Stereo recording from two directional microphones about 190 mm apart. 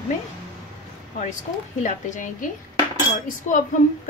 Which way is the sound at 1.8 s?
40° left (ahead or behind).